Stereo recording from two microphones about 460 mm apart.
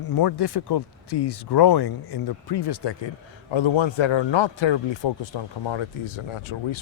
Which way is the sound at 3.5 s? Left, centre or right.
Left.